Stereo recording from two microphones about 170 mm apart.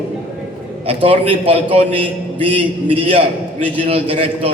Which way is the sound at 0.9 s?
35° right (ahead or behind).